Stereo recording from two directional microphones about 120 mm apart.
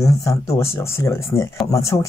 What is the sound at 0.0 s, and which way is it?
Speech, 25° left (ahead or behind).